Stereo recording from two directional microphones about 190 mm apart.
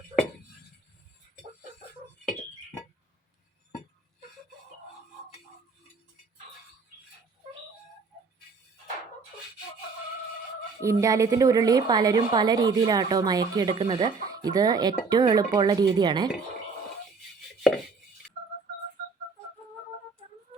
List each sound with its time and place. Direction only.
10.8 s a woman's voice: 15° right (ahead or behind)